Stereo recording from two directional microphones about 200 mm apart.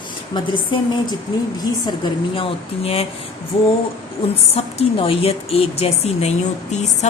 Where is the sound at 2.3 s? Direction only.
30° left (ahead or behind).